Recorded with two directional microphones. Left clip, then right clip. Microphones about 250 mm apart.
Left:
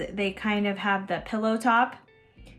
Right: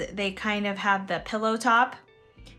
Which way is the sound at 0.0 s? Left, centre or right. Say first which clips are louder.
Even; centre.